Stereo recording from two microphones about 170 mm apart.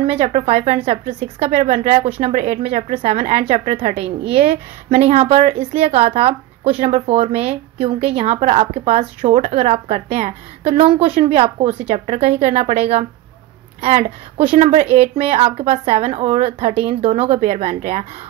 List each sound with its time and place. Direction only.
0.0 s a woman's voice: 40° right (ahead or behind)